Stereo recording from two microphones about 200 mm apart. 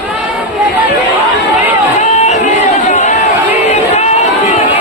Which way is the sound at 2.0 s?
35° left (ahead or behind).